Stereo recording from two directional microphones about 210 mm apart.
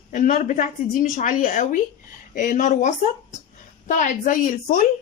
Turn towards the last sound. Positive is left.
turn(degrees=40)  # may be behind; listen again after turning